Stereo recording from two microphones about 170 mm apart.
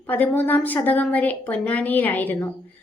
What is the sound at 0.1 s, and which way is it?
A woman's voice, 10° left (ahead or behind).